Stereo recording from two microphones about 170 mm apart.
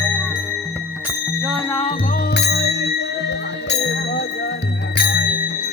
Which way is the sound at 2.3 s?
90° left.